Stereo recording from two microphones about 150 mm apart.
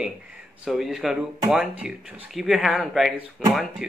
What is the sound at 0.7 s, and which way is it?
Speech, centre (ahead or behind).